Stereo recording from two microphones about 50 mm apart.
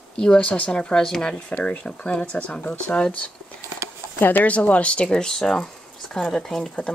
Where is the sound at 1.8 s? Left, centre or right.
Left.